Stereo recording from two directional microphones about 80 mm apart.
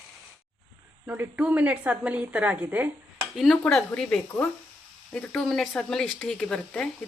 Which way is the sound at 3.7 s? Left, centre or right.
Centre.